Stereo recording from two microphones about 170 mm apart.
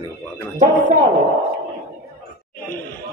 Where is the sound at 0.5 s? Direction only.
45° right (ahead or behind).